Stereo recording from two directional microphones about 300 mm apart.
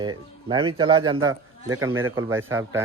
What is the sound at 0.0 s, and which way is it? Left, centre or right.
Speech, centre.